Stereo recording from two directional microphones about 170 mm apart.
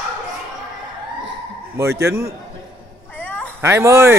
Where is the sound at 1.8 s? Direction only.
15° right (ahead or behind).